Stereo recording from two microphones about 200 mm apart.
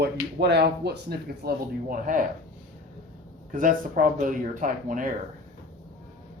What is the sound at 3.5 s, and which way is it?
Speech, 40° right (ahead or behind).